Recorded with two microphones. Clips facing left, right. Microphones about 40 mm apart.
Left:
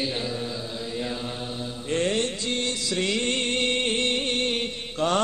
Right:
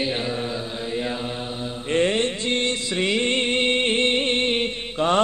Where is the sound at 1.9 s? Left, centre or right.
Right.